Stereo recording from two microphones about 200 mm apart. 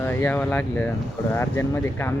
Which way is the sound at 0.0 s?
10° left (ahead or behind).